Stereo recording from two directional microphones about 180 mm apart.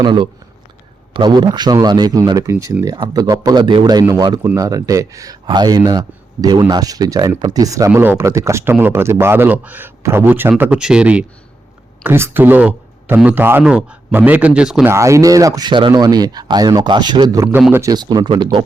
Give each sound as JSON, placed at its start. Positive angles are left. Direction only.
{"t": 0.0, "sound": "a man's voice", "side_deg": -25}
{"t": 14.9, "sound": "a man's voice", "side_deg": -15}